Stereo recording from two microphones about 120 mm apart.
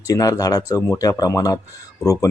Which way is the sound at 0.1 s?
30° left (ahead or behind).